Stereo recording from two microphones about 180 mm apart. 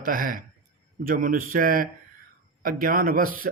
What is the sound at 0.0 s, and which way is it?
Speech, 50° right (ahead or behind).